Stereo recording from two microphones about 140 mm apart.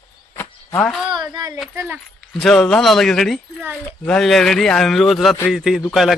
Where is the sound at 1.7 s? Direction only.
20° right (ahead or behind).